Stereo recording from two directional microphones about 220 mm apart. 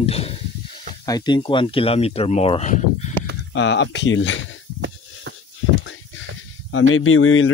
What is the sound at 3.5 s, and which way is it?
Speech, 55° left (ahead or behind).